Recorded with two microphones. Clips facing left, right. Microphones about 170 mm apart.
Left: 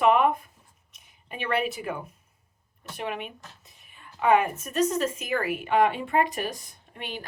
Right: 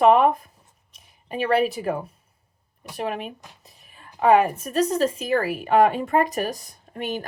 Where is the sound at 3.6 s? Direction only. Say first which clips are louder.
Right 4 dB; 35° right (ahead or behind).